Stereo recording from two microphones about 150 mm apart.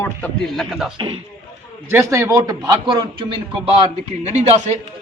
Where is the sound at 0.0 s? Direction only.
5° left (ahead or behind).